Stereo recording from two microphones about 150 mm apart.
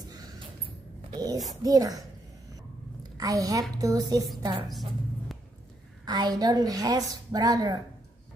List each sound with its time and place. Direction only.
1.1 s a woman's voice: 25° right (ahead or behind)
3.0 s a sound: 25° right (ahead or behind)
3.7 s a woman's voice: 25° right (ahead or behind)
6.0 s a woman's voice: 25° right (ahead or behind)